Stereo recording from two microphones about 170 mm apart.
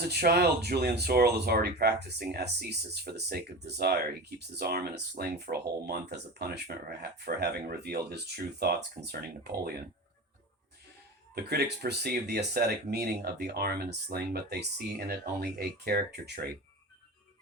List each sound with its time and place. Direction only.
0.0 s speech: 70° right (ahead or behind)
9.0 s speech: 15° right (ahead or behind)
11.3 s speech: 70° right (ahead or behind)